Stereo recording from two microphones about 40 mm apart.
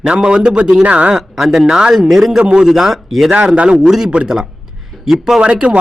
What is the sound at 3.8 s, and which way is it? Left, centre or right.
Speech, centre.